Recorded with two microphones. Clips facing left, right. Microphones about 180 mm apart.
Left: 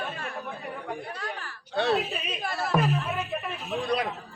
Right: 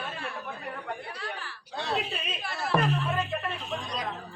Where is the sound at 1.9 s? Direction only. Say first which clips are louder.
Left 3 dB; 5° left (ahead or behind).